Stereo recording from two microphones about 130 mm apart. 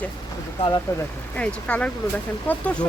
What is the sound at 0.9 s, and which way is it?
Speech, 20° left (ahead or behind).